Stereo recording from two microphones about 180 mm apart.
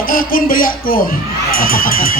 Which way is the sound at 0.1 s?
50° left (ahead or behind).